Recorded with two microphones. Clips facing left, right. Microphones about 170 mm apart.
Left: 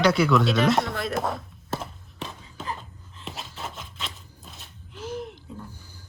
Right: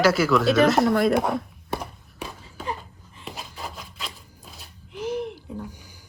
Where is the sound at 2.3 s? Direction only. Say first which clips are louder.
Right 4 dB; centre (ahead or behind).